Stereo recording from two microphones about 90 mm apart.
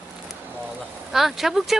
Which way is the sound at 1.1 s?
5° right (ahead or behind).